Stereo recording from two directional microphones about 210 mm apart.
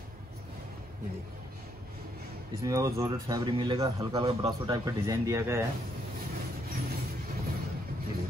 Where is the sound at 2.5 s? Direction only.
15° right (ahead or behind).